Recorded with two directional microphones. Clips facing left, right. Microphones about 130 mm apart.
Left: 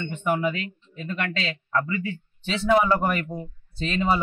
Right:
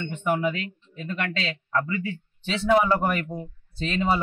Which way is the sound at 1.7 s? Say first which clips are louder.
Left 1 dB; 30° right (ahead or behind).